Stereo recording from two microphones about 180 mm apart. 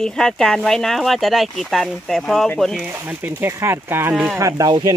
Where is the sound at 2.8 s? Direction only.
10° right (ahead or behind).